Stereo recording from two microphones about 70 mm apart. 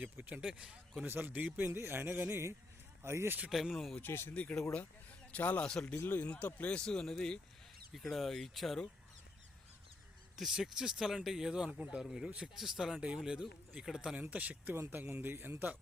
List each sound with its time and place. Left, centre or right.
0.2 s speech: right
0.4 s speech: centre
1.0 s speech: right
3.5 s speech: centre
4.0 s speech: left
4.4 s speech: centre
6.0 s speech: left; by 8.8 s centre
10.5 s speech: centre
12.0 s speech: centre
14.2 s speech: right
14.8 s speech: right